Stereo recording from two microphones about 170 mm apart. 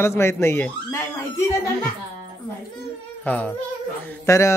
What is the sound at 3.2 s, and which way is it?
Speech, 10° left (ahead or behind).